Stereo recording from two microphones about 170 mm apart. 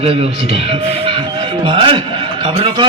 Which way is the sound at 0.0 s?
35° right (ahead or behind).